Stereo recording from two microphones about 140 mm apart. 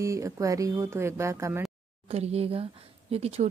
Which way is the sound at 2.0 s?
45° right (ahead or behind).